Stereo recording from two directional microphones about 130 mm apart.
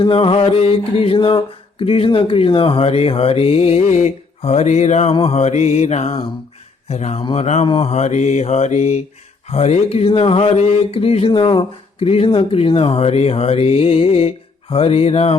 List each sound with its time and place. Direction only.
0.0 s speech: 45° left (ahead or behind)
5.1 s mantra: 50° left (ahead or behind)
6.8 s speech: 55° left (ahead or behind)
7.3 s mantra: 55° left (ahead or behind)
9.5 s speech: 55° left (ahead or behind)